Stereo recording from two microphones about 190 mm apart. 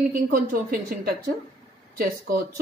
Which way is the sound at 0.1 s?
50° right (ahead or behind).